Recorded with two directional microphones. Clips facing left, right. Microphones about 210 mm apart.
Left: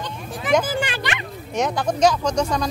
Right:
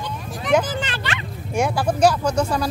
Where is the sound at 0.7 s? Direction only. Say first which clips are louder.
Left 2 dB; 15° left (ahead or behind).